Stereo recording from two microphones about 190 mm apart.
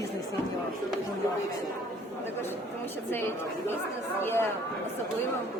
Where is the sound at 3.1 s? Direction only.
10° left (ahead or behind).